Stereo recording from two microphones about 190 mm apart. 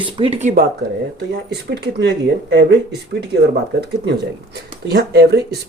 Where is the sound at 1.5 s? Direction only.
60° right (ahead or behind).